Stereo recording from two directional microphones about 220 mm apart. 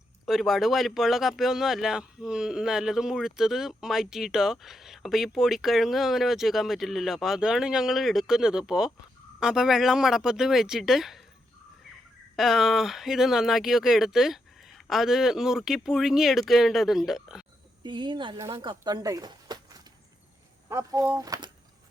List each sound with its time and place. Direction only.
0.3 s speech: centre (ahead or behind)
12.4 s speech: centre (ahead or behind)
17.8 s speech: 20° right (ahead or behind)